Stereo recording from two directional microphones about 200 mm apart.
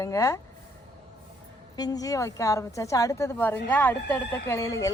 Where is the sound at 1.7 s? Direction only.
20° left (ahead or behind).